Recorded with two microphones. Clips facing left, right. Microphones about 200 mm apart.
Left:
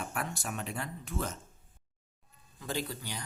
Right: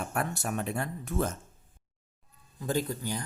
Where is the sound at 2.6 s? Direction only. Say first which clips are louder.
Right 6 dB; 45° right (ahead or behind).